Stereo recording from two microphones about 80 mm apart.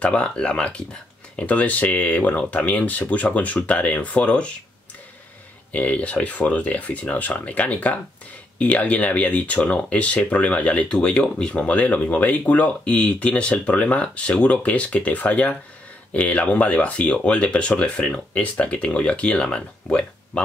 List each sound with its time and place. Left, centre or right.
0.0 s speech: centre
5.7 s speech: centre